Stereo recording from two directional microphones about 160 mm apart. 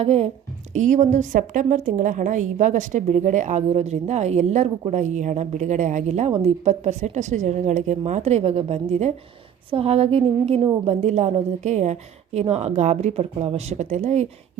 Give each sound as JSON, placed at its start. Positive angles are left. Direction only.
{"t": 0.0, "sound": "a woman's voice", "side_deg": -40}